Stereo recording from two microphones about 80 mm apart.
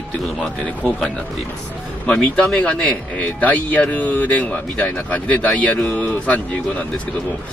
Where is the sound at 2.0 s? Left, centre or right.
Centre.